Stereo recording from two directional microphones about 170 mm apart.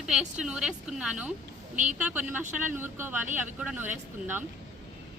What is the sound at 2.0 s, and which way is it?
Speech, 10° right (ahead or behind).